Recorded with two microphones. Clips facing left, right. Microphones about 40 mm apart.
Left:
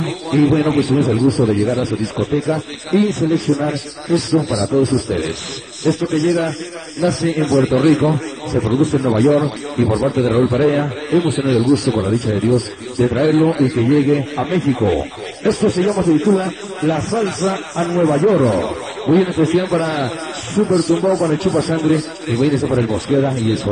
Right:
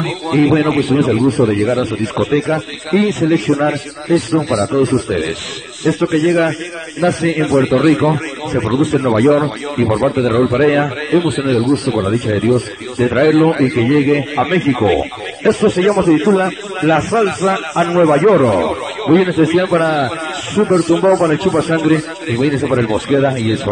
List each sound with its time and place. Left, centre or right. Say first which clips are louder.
0.0 s a man's voice: right 2 dB; right
8.1 s a man's voice: right 2 dB; right
10.6 s a man's voice: right 3 dB; right
11.4 s speech: even; centre
12.0 s a man's voice: right 2 dB; right
13.1 s a man's voice: right 4 dB; right